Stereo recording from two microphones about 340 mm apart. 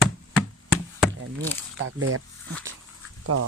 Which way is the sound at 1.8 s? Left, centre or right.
Right.